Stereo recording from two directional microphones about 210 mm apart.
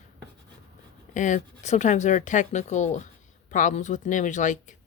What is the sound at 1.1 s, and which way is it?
Speech, 35° left (ahead or behind).